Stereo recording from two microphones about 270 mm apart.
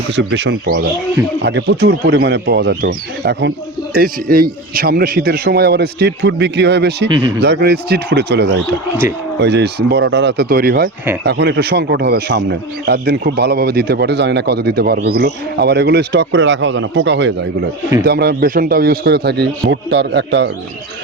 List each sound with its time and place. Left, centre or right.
0.2 s a man's voice: right
7.1 s speech: centre
7.4 s a man's voice: right